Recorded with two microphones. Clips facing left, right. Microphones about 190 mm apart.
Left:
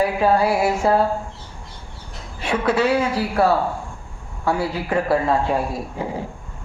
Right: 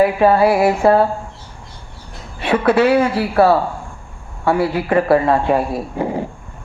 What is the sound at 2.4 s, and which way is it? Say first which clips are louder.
Speech: right 6 dB; 60° right (ahead or behind).